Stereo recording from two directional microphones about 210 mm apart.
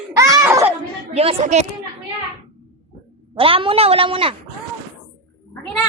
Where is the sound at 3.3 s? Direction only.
25° right (ahead or behind).